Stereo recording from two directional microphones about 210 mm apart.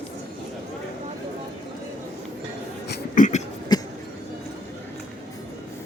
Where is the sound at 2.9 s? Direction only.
40° left (ahead or behind).